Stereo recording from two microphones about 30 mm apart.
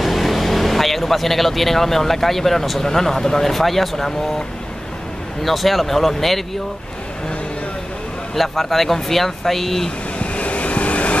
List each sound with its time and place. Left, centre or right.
0.0 s speech: centre
3.5 s speech: centre
5.4 s speech: centre
8.4 s speech: centre
10.1 s vehicle: left